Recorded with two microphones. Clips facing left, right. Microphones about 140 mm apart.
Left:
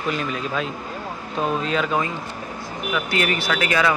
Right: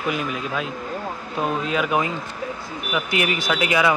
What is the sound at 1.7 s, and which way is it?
Speech, 10° right (ahead or behind).